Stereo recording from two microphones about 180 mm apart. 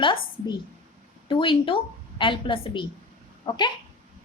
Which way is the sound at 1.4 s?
30° left (ahead or behind).